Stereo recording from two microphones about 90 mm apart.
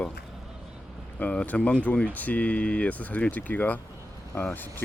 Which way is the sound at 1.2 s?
15° left (ahead or behind).